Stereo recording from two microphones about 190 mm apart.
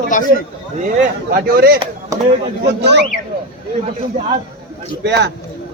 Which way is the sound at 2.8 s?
65° right (ahead or behind).